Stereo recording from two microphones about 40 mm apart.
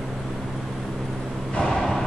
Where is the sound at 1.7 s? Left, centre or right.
Centre.